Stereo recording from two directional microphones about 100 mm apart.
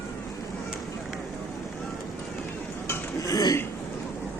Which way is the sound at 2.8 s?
30° left (ahead or behind).